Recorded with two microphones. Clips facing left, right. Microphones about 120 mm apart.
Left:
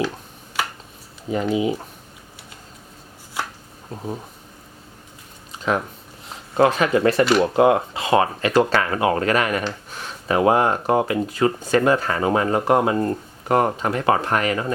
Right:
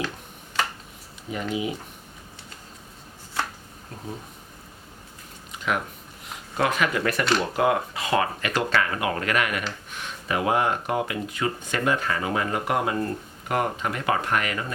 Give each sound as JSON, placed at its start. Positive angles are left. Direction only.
{"t": 1.3, "sound": "speech", "side_deg": 30}
{"t": 5.5, "sound": "a sound", "side_deg": 30}
{"t": 6.2, "sound": "speech", "side_deg": 30}